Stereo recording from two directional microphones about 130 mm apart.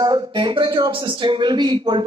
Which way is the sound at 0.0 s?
35° right (ahead or behind).